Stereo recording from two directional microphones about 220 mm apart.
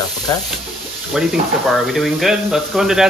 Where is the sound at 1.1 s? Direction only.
Centre (ahead or behind).